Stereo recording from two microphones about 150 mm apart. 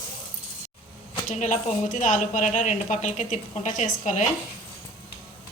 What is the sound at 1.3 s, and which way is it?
Speech, 55° left (ahead or behind).